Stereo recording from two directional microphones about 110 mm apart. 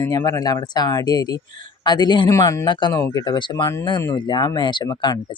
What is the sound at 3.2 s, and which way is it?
Speech, 45° left (ahead or behind).